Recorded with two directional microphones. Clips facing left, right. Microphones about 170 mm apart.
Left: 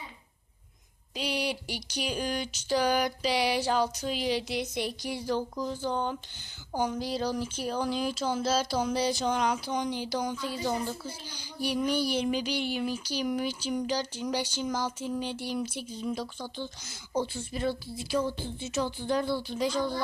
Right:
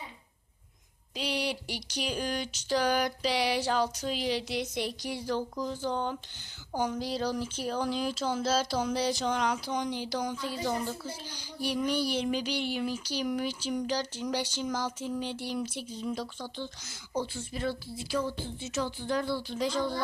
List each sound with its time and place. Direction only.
1.1 s speech: 5° left (ahead or behind)
6.7 s a sound: 10° left (ahead or behind)
11.6 s speech: 5° left (ahead or behind)
17.2 s a woman's voice: 20° left (ahead or behind)